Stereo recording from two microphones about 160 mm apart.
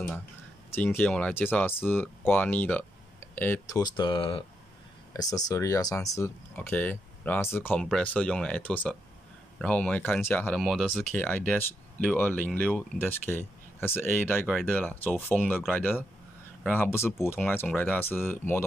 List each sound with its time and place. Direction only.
0.7 s speech: 10° left (ahead or behind); by 4.5 s 35° left (ahead or behind)
5.1 s speech: 20° left (ahead or behind)
10.6 s speech: centre (ahead or behind)